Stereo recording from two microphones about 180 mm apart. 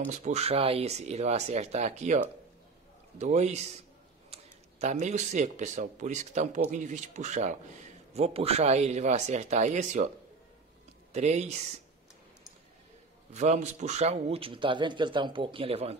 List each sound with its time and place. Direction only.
0.0 s a man's voice: 40° right (ahead or behind)
11.1 s a man's voice: 40° right (ahead or behind)
13.3 s a man's voice: 40° right (ahead or behind)